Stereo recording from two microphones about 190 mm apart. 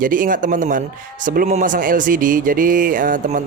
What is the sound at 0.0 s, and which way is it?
Speech, 45° right (ahead or behind).